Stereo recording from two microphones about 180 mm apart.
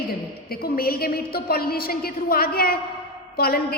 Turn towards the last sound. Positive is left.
turn(degrees=60)  # may be behind; listen again after turning